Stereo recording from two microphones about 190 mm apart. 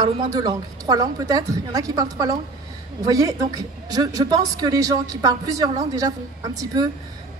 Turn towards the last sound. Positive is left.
turn(degrees=-20)  # may be behind; listen again after turning